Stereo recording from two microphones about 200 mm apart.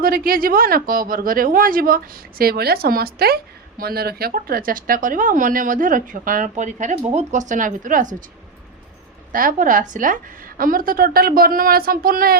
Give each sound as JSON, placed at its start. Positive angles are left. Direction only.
{"t": 0.0, "sound": "a woman's voice", "side_deg": -45}
{"t": 9.3, "sound": "a woman's voice", "side_deg": -45}